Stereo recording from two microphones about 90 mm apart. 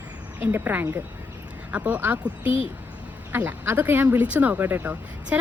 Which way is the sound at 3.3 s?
20° right (ahead or behind).